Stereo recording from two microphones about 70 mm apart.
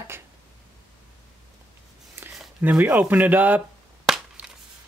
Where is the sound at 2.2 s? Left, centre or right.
Right.